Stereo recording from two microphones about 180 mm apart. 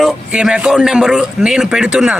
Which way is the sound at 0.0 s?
5° right (ahead or behind).